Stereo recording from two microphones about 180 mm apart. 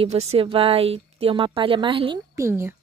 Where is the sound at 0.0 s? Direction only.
35° right (ahead or behind).